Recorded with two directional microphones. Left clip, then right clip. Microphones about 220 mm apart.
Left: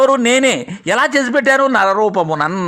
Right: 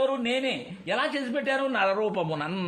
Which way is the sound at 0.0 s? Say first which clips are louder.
Left 15 dB; 40° left (ahead or behind).